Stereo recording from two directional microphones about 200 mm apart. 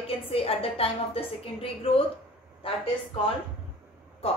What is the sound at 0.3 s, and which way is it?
A woman's voice, 30° left (ahead or behind).